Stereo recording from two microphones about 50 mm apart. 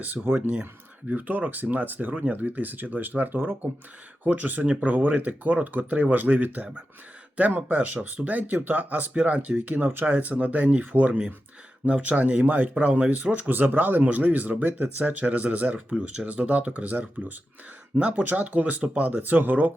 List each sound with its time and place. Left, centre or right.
0.0 s speech: right
9.1 s speech: right
9.6 s speech: right